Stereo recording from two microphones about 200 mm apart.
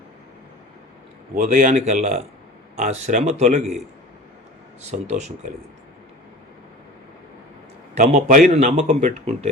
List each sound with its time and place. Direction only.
1.4 s a man's voice: 40° right (ahead or behind)
7.9 s a man's voice: 40° right (ahead or behind)